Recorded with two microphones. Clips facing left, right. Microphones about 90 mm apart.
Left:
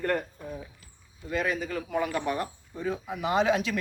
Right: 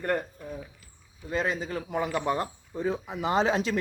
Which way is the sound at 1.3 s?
25° right (ahead or behind).